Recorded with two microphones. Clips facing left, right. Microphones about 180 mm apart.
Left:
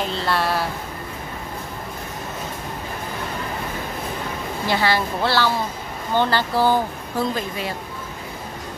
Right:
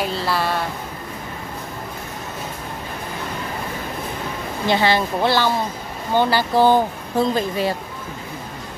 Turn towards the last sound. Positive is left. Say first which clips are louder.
# right 5 dB
turn(degrees=-25)  # may be behind; listen again after turning